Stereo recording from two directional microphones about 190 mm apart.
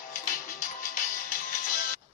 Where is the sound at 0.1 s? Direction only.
45° left (ahead or behind).